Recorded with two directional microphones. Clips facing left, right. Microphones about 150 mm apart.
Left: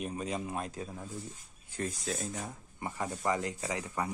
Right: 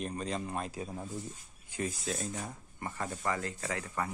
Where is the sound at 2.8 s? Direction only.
15° left (ahead or behind).